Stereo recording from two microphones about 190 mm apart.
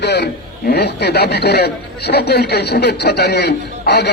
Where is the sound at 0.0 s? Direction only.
65° left (ahead or behind).